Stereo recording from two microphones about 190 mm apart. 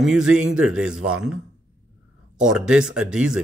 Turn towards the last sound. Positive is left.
turn(degrees=-5)  # may be behind; listen again after turning